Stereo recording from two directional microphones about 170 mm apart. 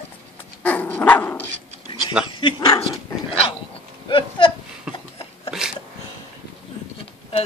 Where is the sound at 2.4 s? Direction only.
20° left (ahead or behind).